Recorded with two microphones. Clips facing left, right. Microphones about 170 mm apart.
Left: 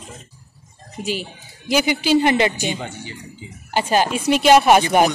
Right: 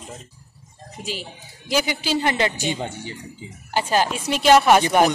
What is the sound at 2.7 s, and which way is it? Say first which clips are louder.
Speech: right 1 dB; 30° right (ahead or behind).